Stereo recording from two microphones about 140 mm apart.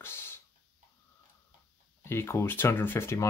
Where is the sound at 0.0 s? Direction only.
15° left (ahead or behind).